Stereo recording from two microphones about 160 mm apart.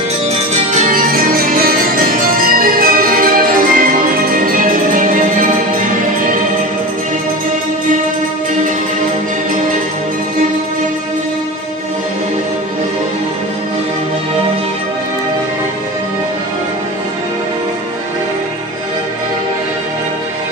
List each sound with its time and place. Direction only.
0.7 s music: 60° right (ahead or behind)